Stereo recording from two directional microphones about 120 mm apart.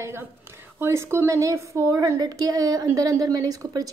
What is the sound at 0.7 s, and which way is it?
A woman's voice, 20° right (ahead or behind).